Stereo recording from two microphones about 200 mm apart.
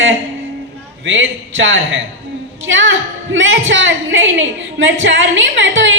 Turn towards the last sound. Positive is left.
turn(degrees=-65)  # may be behind; listen again after turning